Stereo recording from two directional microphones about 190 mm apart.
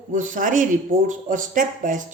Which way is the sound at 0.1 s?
45° right (ahead or behind).